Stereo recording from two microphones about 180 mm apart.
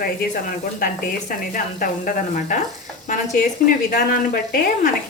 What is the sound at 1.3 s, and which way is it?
A woman's voice, 50° left (ahead or behind).